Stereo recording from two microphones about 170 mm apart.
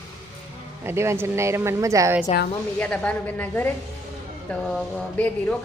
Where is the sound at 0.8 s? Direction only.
15° right (ahead or behind).